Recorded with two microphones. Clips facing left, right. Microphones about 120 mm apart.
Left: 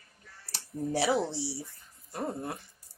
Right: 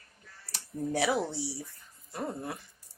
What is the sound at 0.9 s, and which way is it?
Speech, 30° left (ahead or behind).